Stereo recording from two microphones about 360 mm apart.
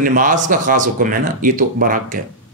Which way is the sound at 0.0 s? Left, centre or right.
Right.